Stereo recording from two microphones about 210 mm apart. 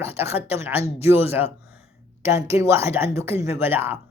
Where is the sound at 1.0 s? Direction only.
10° right (ahead or behind).